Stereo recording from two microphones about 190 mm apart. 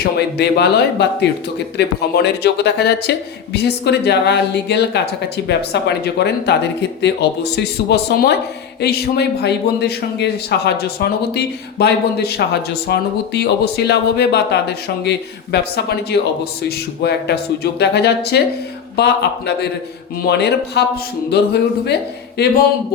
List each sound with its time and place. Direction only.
0.0 s a man's voice: 60° left (ahead or behind)